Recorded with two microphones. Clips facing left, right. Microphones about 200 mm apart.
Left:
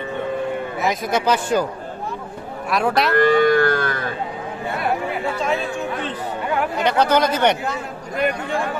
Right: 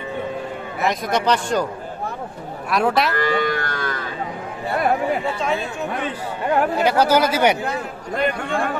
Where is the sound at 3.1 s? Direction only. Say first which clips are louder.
Left 6 dB; 55° left (ahead or behind).